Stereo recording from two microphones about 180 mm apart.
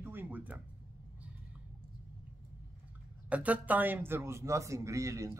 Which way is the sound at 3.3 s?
10° right (ahead or behind).